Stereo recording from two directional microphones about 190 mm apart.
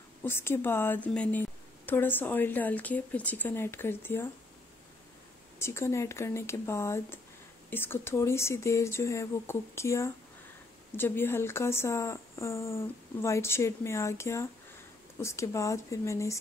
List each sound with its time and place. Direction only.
0.2 s a woman's voice: 10° left (ahead or behind)
5.6 s a woman's voice: 15° left (ahead or behind)